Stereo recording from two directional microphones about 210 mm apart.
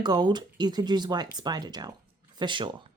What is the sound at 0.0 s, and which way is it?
Speech, 20° right (ahead or behind).